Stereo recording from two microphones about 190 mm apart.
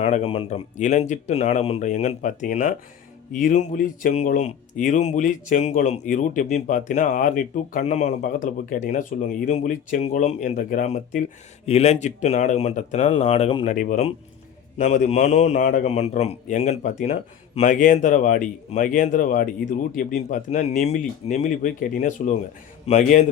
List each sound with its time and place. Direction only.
0.0 s speech: 30° left (ahead or behind)
13.7 s speech: 40° left (ahead or behind)